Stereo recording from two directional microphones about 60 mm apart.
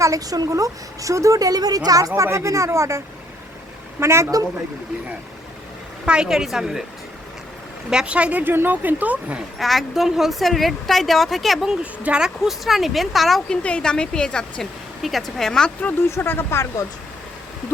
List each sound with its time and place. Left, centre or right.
0.0 s a woman's voice: right
2.2 s speech: right
4.0 s speech: right
6.1 s a woman's voice: centre
7.9 s speech: centre
9.6 s a woman's voice: centre
11.8 s speech: centre
12.5 s a woman's voice: centre
13.5 s a woman's voice: centre
15.0 s a woman's voice: centre
16.0 s speech: left